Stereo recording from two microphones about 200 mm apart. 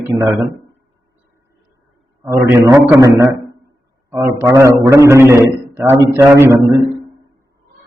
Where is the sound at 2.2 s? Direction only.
15° right (ahead or behind).